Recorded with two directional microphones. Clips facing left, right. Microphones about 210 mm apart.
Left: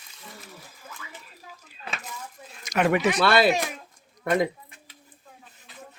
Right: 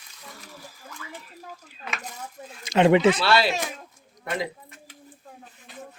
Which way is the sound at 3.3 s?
50° left (ahead or behind).